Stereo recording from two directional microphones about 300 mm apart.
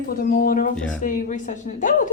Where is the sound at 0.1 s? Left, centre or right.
Left.